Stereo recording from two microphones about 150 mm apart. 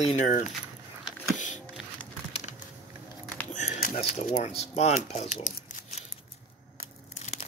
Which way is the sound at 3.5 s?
50° left (ahead or behind).